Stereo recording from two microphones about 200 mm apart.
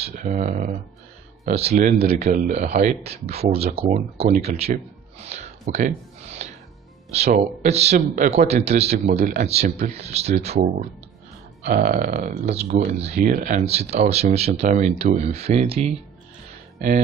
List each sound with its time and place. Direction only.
0.0 s speech: 40° right (ahead or behind)
5.2 s gasp: 35° right (ahead or behind)
7.1 s speech: 30° right (ahead or behind)
11.6 s speech: 45° right (ahead or behind)